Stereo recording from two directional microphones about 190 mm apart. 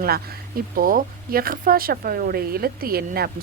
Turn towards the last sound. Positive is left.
turn(degrees=-50)  # may be behind; listen again after turning